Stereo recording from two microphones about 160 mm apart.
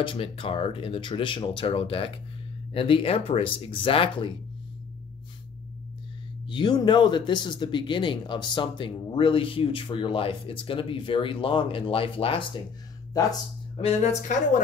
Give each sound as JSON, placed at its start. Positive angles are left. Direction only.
{"t": 0.0, "sound": "speech", "side_deg": 35}
{"t": 6.4, "sound": "speech", "side_deg": 30}
{"t": 13.2, "sound": "speech", "side_deg": 20}
{"t": 13.7, "sound": "a woman's voice", "side_deg": 45}